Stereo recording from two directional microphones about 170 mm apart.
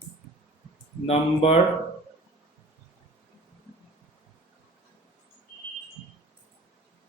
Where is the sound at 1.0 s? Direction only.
35° left (ahead or behind).